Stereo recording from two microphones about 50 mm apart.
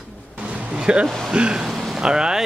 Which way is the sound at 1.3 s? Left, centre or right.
Centre.